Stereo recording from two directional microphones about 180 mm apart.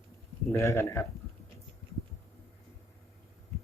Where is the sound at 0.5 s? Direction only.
15° left (ahead or behind).